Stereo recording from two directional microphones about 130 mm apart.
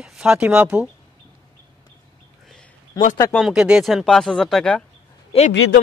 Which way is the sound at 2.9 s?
30° left (ahead or behind).